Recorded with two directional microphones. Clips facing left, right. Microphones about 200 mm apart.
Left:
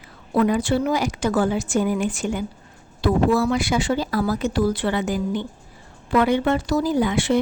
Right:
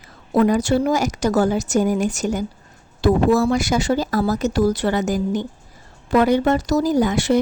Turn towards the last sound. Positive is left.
turn(degrees=-40)  # may be behind; listen again after turning